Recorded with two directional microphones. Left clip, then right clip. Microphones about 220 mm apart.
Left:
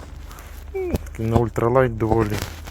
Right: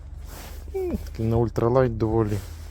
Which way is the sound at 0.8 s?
20° right (ahead or behind).